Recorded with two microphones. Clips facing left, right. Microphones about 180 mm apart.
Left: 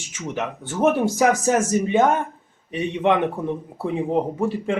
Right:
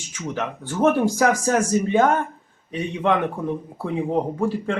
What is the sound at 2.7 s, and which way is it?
Speech, 25° left (ahead or behind).